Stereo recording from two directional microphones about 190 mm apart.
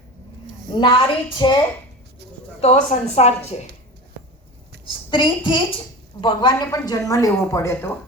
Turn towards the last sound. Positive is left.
turn(degrees=15)  # may be behind; listen again after turning